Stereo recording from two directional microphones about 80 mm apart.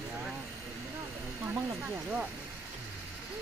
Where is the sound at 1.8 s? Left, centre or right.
Centre.